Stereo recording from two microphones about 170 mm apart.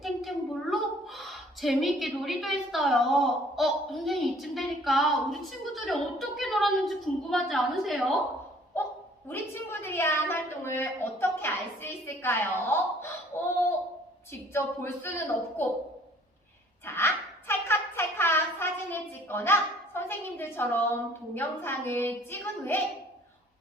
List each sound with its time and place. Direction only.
0.0 s a woman's voice: centre (ahead or behind)
9.3 s a woman's voice: 15° left (ahead or behind)
14.5 s a woman's voice: 15° left (ahead or behind)
16.8 s a woman's voice: 15° left (ahead or behind)